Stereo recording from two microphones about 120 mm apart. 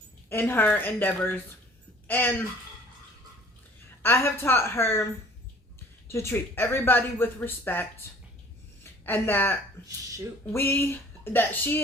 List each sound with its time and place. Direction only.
0.3 s a woman's voice: 20° left (ahead or behind)
4.0 s speech: 20° left (ahead or behind)
6.1 s a woman's voice: 20° left (ahead or behind)